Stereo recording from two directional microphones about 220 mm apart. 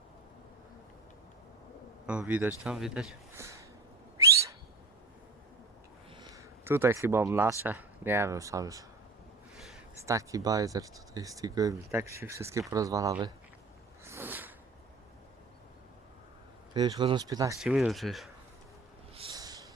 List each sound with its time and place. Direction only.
2.0 s speech: 5° right (ahead or behind)
6.1 s speech: 15° right (ahead or behind)
9.6 s a sound: centre (ahead or behind)
10.1 s speech: 15° right (ahead or behind)
14.0 s a sound: 10° right (ahead or behind)
16.7 s speech: 20° right (ahead or behind)
17.6 s speech: centre (ahead or behind)
19.1 s snort: 20° right (ahead or behind)